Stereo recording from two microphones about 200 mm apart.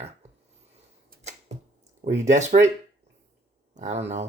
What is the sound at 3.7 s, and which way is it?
Speech, 35° right (ahead or behind).